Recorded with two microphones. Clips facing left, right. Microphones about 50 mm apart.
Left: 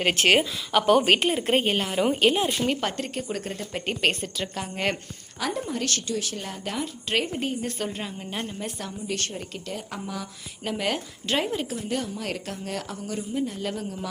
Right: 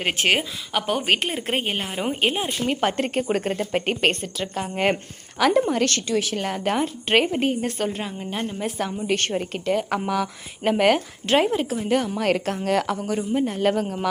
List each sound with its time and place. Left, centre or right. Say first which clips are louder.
0.0 s a woman's voice: left 1 dB; centre
3.0 s a woman's voice: right 8 dB; right
4.1 s a woman's voice: right 3 dB; centre
4.5 s a woman's voice: right 7 dB; centre
5.4 s a woman's voice: right 10 dB; right
7.9 s a woman's voice: right 4 dB; centre
9.3 s a woman's voice: right 10 dB; right
9.7 s speech: right 11 dB; right
10.6 s a woman's voice: right 9 dB; right
11.4 s a woman's voice: right 6 dB; centre
11.9 s speech: right 11 dB; right
13.1 s a woman's voice: right 6 dB; right
13.4 s a woman's voice: right 8 dB; right